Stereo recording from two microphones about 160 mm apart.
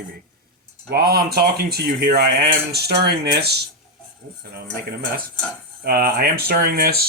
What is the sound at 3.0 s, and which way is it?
Speech, 90° right.